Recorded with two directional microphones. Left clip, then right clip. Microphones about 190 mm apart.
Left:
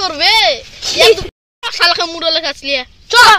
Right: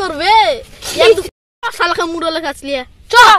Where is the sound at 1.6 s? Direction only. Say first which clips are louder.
Left 2 dB; 65° right (ahead or behind).